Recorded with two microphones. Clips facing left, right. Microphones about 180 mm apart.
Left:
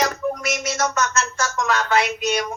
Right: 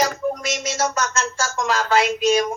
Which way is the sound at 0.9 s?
30° right (ahead or behind).